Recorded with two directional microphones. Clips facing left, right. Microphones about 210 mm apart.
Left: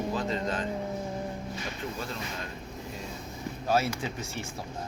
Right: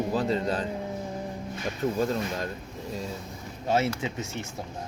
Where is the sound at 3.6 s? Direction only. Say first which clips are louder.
Right 2 dB; 25° right (ahead or behind).